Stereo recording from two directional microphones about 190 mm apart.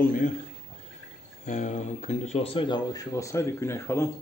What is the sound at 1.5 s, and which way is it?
Speech, 40° left (ahead or behind).